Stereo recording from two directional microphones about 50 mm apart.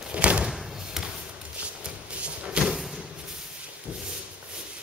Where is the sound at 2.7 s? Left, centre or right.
Centre.